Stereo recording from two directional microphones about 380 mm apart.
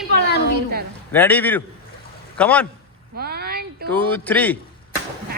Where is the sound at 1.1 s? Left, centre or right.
Centre.